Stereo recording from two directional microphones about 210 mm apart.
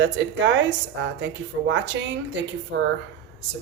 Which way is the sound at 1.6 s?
60° right (ahead or behind).